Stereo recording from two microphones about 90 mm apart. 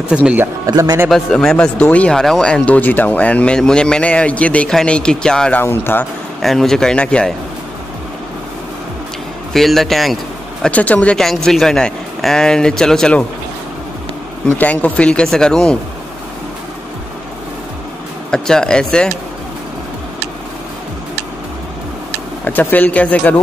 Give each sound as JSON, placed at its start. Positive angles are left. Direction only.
{"t": 0.1, "sound": "speech", "side_deg": -15}
{"t": 1.1, "sound": "speech", "side_deg": 5}
{"t": 5.6, "sound": "speech", "side_deg": 25}
{"t": 6.4, "sound": "speech", "side_deg": 5}
{"t": 9.5, "sound": "speech", "side_deg": 5}
{"t": 10.6, "sound": "speech", "side_deg": 15}
{"t": 11.1, "sound": "speech", "side_deg": 5}
{"t": 14.6, "sound": "speech", "side_deg": 15}
{"t": 18.3, "sound": "speech", "side_deg": 10}
{"t": 22.4, "sound": "speech", "side_deg": 20}